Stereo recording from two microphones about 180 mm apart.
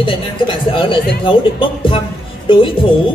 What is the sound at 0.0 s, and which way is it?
A woman's voice, 25° left (ahead or behind).